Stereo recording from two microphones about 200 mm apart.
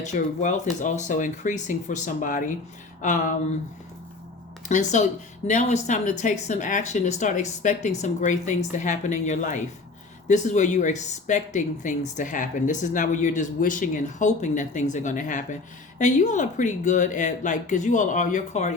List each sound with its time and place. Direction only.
0.0 s speech: 35° left (ahead or behind)
4.7 s speech: 35° left (ahead or behind)